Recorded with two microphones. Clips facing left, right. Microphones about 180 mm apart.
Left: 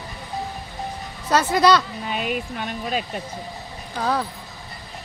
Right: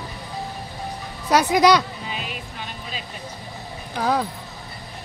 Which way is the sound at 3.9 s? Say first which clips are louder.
Right 2 dB; 15° right (ahead or behind).